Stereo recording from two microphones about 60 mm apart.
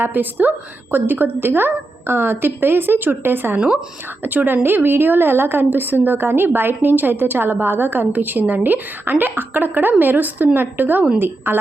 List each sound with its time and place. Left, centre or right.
0.0 s a woman's voice: right